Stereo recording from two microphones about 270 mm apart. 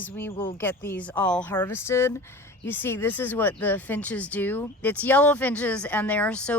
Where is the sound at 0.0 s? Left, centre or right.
Centre.